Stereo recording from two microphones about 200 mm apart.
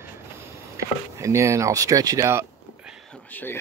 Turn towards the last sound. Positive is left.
turn(degrees=10)  # may be behind; listen again after turning